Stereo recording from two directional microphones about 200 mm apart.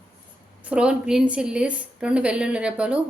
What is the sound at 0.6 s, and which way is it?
A woman's voice, 5° right (ahead or behind).